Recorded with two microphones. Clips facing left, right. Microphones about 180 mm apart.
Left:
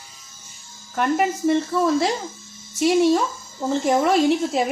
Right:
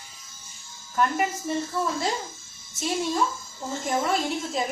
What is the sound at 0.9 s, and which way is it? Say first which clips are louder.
A woman's voice: left 4 dB; 80° left.